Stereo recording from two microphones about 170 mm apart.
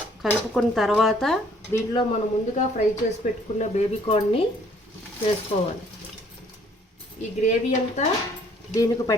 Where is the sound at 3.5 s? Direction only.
40° left (ahead or behind).